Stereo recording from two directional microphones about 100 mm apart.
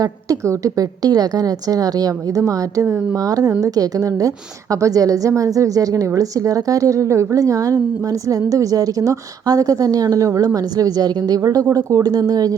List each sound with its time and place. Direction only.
0.0 s a woman's voice: 35° right (ahead or behind)